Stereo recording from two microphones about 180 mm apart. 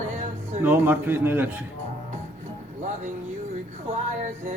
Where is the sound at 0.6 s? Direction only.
10° right (ahead or behind).